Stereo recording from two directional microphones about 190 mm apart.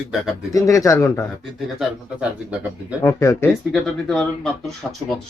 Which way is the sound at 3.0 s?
15° left (ahead or behind).